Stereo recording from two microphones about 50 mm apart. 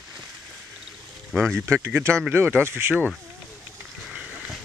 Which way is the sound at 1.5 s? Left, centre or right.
Right.